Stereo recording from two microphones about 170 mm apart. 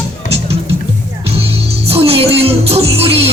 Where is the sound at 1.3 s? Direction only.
35° right (ahead or behind).